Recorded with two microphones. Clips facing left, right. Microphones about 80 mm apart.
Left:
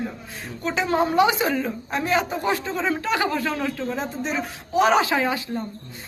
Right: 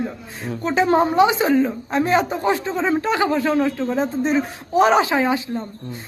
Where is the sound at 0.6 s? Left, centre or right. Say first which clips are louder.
Right 6 dB; right.